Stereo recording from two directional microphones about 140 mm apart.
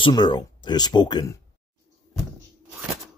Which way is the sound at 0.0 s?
35° left (ahead or behind).